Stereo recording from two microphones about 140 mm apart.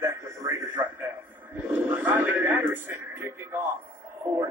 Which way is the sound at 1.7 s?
10° right (ahead or behind).